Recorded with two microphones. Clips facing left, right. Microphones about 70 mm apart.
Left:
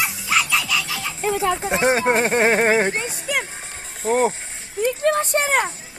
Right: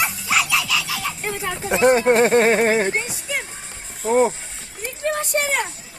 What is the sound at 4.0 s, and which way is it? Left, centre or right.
Speech, left.